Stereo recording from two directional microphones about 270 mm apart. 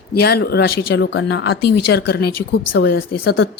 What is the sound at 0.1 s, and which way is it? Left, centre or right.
Speech, left.